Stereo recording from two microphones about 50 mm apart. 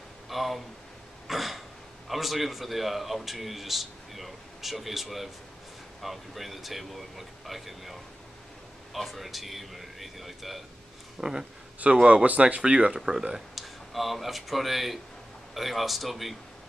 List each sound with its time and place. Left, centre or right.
0.3 s speech: centre
1.2 s throat clearing: centre
2.0 s speech: centre
13.6 s speech: centre